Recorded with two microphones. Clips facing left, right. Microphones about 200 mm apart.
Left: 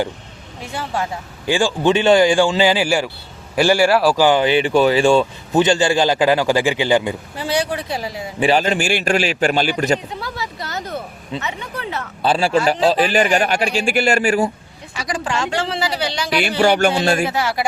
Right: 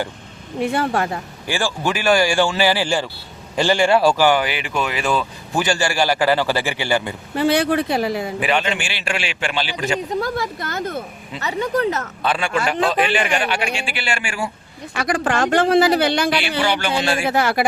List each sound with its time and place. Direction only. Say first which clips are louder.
0.6 s speech: right 5 dB; 60° right (ahead or behind)
1.5 s speech: left 6 dB; 15° left (ahead or behind)
4.2 s a man's voice: left 3 dB; 20° left (ahead or behind)
7.3 s speech: right 6 dB; 60° right (ahead or behind)
8.4 s a man's voice: left 9 dB; 35° left (ahead or behind)
10.2 s speech: right 5 dB; 50° right (ahead or behind)
11.3 s speech: right 7 dB; 40° right (ahead or behind)
12.2 s a man's voice: left 6 dB; 30° left (ahead or behind)
14.9 s speech: right 3 dB; 55° right (ahead or behind)
16.3 s music: left 4 dB; 45° left (ahead or behind)
17.3 s speech: right 3 dB; 55° right (ahead or behind)